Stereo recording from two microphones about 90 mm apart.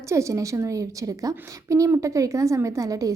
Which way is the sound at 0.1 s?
35° right (ahead or behind).